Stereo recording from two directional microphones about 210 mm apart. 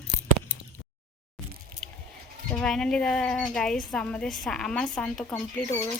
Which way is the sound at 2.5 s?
5° left (ahead or behind).